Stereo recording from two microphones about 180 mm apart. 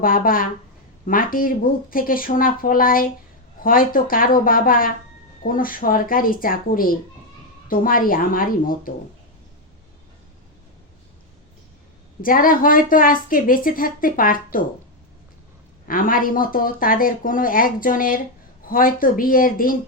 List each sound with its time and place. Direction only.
0.0 s a woman's voice: 50° left (ahead or behind)
12.2 s a woman's voice: 50° left (ahead or behind)
15.9 s a woman's voice: 50° left (ahead or behind)